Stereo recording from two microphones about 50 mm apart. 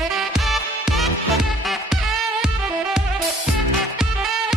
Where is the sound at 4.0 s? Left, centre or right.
Centre.